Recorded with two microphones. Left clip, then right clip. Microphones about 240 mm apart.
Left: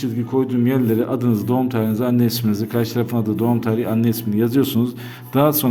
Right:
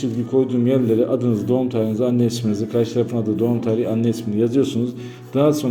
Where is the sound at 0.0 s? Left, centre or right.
Left.